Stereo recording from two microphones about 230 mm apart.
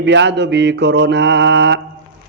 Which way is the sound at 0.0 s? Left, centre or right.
Right.